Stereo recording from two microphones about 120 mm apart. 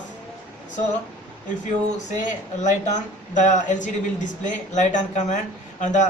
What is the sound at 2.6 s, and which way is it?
Speech, 75° left (ahead or behind).